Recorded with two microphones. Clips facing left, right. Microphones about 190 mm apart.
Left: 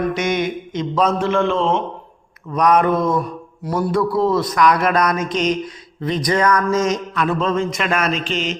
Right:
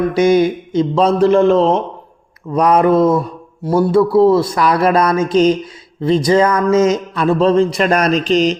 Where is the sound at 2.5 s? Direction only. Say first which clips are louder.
Right 4 dB; 30° right (ahead or behind).